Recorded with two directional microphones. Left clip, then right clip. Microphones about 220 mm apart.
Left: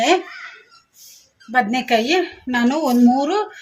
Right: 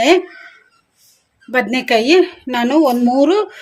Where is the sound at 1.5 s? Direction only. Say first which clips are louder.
Right 2 dB; 45° right (ahead or behind).